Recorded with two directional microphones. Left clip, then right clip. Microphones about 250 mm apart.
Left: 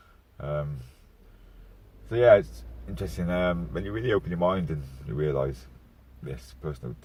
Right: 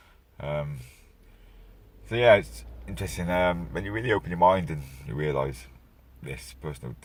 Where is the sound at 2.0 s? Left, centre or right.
Right.